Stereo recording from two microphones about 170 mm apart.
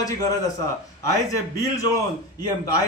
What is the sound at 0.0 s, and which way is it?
Speech, 20° left (ahead or behind).